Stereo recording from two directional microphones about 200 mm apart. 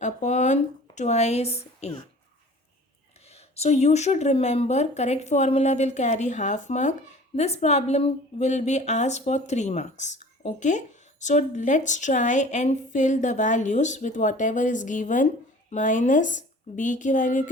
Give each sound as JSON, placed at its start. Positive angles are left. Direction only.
{"t": 0.0, "sound": "speech", "side_deg": 35}
{"t": 3.2, "sound": "a woman's voice", "side_deg": 30}